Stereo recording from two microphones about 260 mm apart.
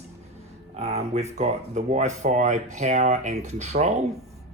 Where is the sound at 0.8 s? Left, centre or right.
Right.